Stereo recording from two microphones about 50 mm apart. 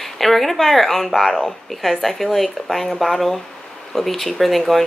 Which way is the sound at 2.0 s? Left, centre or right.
Centre.